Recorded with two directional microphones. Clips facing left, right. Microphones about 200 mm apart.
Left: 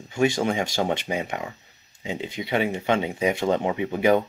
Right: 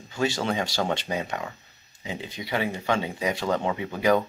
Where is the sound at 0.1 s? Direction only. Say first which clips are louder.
Left 4 dB; 20° left (ahead or behind).